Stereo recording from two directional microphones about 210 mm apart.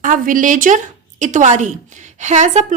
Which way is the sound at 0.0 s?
40° right (ahead or behind).